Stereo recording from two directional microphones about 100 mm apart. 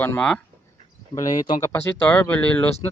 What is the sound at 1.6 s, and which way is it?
Speech, 25° left (ahead or behind).